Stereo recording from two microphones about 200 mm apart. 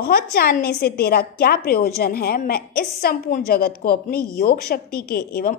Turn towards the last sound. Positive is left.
turn(degrees=50)  # may be behind; listen again after turning